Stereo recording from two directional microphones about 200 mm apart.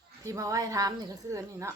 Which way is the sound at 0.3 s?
15° right (ahead or behind).